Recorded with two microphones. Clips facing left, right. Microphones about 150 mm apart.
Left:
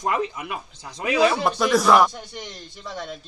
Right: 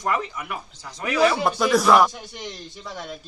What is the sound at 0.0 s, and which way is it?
Speech, 20° left (ahead or behind).